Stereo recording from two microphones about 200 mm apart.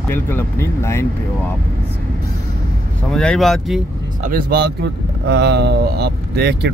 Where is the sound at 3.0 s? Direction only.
5° left (ahead or behind).